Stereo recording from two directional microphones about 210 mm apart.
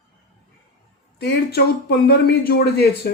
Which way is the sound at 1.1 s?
50° left (ahead or behind).